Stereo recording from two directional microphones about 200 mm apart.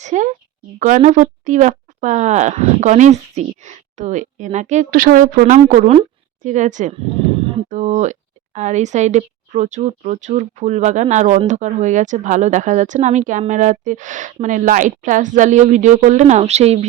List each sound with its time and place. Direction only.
0.0 s a woman's voice: 40° right (ahead or behind)